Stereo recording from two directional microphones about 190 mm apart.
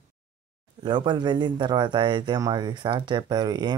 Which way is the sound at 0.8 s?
25° right (ahead or behind).